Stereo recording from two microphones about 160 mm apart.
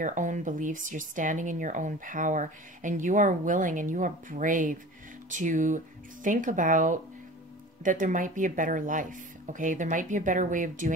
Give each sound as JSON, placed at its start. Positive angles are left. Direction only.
{"t": 0.0, "sound": "speech", "side_deg": -50}